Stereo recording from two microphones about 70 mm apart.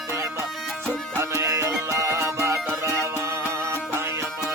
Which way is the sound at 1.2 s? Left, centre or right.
Right.